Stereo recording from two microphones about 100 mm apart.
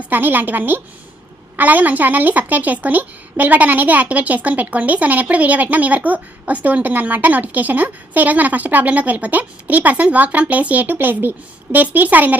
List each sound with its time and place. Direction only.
0.1 s a woman's voice: 20° right (ahead or behind)